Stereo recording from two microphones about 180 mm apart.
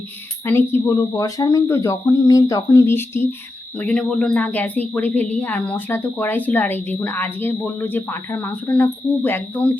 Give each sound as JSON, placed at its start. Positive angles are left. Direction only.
{"t": 0.4, "sound": "a woman's voice", "side_deg": 10}